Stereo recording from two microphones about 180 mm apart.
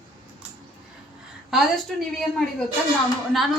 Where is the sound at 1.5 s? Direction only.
Centre (ahead or behind).